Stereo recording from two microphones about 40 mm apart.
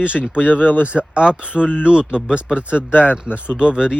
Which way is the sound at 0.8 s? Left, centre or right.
Right.